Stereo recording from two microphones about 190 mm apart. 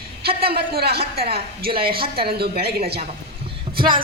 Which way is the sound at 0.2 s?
55° right (ahead or behind).